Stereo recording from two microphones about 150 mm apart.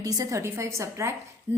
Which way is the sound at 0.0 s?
25° right (ahead or behind).